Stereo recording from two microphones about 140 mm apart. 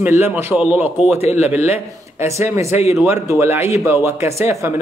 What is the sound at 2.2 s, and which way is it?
Speech, 20° right (ahead or behind).